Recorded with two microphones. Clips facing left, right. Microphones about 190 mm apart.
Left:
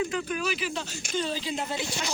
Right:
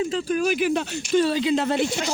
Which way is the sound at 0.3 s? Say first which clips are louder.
Right 9 dB; 50° right (ahead or behind).